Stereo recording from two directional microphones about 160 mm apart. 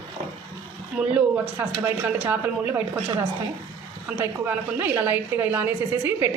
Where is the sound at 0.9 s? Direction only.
10° right (ahead or behind).